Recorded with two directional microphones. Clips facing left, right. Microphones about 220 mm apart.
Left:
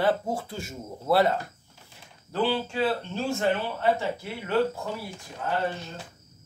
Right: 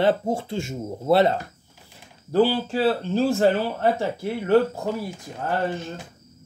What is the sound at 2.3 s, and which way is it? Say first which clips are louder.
Speech: right 6 dB; 35° right (ahead or behind).